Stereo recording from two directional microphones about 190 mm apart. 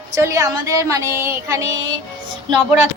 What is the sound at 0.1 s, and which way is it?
Child singing, 15° right (ahead or behind).